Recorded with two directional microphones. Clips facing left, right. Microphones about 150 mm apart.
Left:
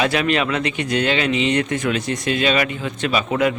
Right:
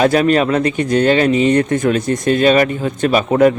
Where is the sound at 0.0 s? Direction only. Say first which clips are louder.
Right 7 dB; 40° right (ahead or behind).